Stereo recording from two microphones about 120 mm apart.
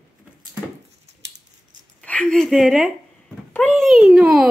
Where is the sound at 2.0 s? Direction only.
10° left (ahead or behind).